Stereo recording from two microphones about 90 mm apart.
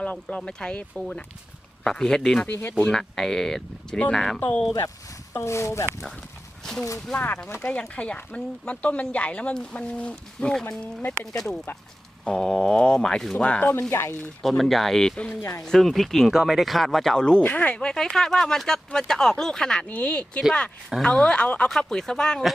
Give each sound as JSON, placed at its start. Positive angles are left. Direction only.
{"t": 0.0, "sound": "speech", "side_deg": 15}
{"t": 2.5, "sound": "speech", "side_deg": 25}
{"t": 2.9, "sound": "speech", "side_deg": 5}
{"t": 4.4, "sound": "speech", "side_deg": 20}
{"t": 5.3, "sound": "speech", "side_deg": 30}
{"t": 7.1, "sound": "speech", "side_deg": 20}
{"t": 14.4, "sound": "speech", "side_deg": 0}
{"t": 15.4, "sound": "speech", "side_deg": 35}
{"t": 15.6, "sound": "speech", "side_deg": 5}